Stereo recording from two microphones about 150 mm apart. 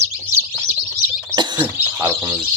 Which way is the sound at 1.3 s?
30° right (ahead or behind).